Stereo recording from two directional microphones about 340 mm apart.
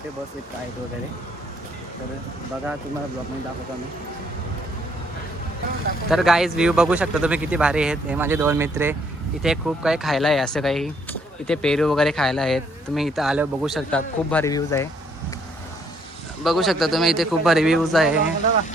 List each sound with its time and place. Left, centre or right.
6.1 s speech: centre
16.4 s speech: centre